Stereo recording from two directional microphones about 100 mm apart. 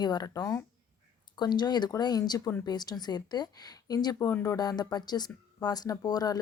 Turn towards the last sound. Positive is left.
turn(degrees=40)  # may be behind; listen again after turning